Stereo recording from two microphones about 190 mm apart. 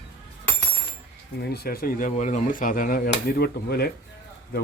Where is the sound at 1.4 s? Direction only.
55° left (ahead or behind).